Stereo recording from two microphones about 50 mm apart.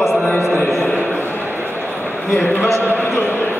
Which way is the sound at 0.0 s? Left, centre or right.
Centre.